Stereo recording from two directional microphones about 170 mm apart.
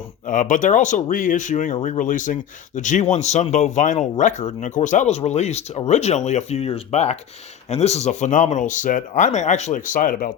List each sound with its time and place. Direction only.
0.3 s speech: 50° left (ahead or behind)